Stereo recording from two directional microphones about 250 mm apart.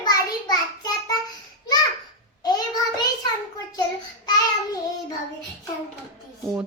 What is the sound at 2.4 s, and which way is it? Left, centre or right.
Child singing, centre.